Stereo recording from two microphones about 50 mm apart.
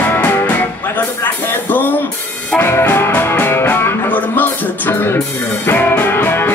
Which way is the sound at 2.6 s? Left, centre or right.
Left.